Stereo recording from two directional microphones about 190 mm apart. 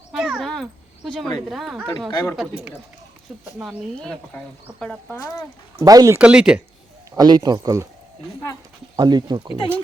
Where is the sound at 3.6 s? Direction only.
Centre (ahead or behind).